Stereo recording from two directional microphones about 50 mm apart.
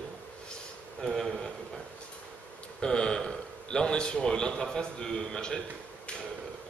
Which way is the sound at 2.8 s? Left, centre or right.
Centre.